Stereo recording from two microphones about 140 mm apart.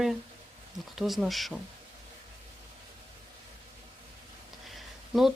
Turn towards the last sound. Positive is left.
turn(degrees=0)  # may be behind; listen again after turning